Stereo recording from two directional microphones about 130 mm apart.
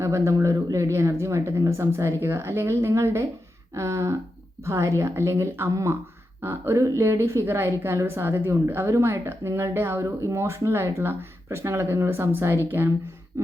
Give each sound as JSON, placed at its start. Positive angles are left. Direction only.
{"t": 0.0, "sound": "a woman's voice", "side_deg": -20}